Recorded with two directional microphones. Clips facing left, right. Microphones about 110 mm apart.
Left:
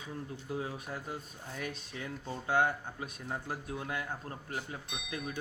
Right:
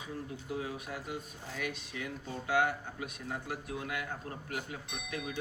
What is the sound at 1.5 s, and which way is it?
Speech, 35° left (ahead or behind).